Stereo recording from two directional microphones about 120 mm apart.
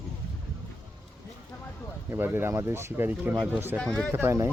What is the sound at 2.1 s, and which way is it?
Speech, 20° right (ahead or behind).